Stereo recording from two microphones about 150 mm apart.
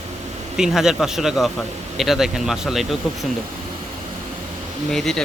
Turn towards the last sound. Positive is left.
turn(degrees=5)  # may be behind; listen again after turning